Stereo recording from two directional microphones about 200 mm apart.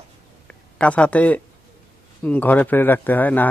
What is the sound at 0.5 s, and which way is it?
A man's voice, 5° left (ahead or behind).